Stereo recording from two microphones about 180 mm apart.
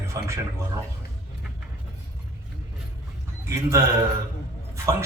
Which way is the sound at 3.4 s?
15° right (ahead or behind).